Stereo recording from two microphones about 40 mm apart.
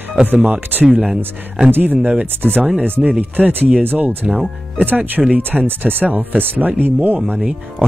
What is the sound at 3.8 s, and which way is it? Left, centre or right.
Speech, right.